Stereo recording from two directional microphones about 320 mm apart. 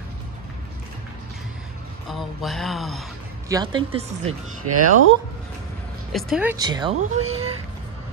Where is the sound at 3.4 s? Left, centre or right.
Centre.